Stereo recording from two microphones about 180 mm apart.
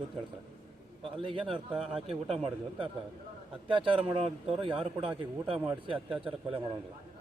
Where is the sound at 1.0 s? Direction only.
30° right (ahead or behind).